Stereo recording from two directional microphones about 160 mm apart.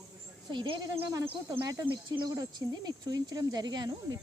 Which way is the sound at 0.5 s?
30° right (ahead or behind).